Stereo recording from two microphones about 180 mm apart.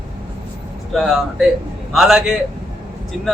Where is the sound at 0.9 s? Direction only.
Centre (ahead or behind).